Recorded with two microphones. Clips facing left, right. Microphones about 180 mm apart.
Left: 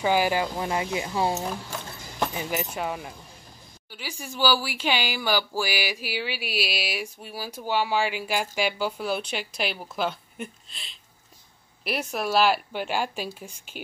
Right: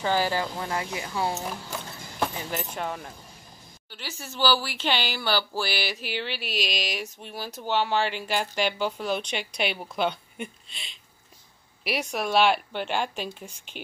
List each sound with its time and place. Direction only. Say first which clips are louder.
0.0 s speech: left 2 dB; 15° left (ahead or behind)
2.3 s a woman's voice: left 3 dB; 10° left (ahead or behind)